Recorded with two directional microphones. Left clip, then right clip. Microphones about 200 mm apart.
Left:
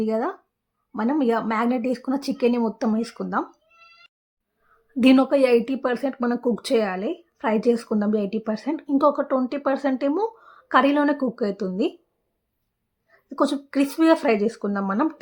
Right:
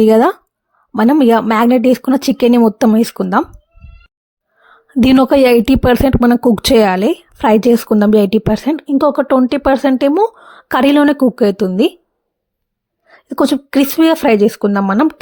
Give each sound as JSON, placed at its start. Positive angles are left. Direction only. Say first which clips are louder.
{"t": 0.0, "sound": "a woman's voice", "louder": "right 15 dB", "side_deg": -55}
{"t": 4.6, "sound": "a woman's voice", "louder": "right 6 dB", "side_deg": -55}
{"t": 13.1, "sound": "a woman's voice", "louder": "right 9 dB", "side_deg": -45}